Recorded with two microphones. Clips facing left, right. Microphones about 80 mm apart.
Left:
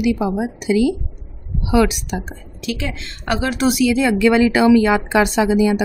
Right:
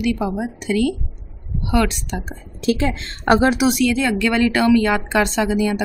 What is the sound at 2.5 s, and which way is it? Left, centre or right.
Speech, right.